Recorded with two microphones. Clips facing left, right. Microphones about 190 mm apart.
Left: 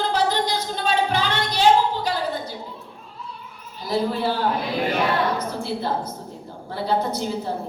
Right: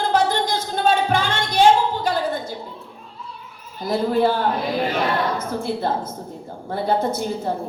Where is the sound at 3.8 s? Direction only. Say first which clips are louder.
Right 4 dB; 50° right (ahead or behind).